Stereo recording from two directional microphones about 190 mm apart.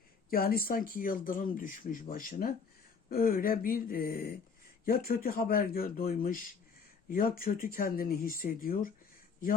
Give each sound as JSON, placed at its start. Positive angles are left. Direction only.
{"t": 0.3, "sound": "speech", "side_deg": 50}